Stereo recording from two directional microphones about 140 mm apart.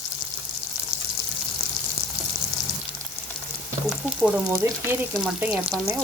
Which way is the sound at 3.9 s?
5° right (ahead or behind).